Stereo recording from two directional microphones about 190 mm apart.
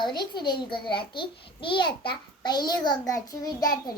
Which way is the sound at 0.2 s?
25° left (ahead or behind).